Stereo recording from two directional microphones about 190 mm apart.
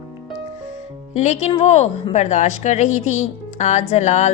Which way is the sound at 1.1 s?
40° left (ahead or behind).